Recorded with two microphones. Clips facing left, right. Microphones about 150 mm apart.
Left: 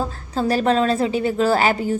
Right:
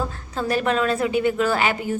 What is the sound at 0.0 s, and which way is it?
A woman's voice, 30° left (ahead or behind).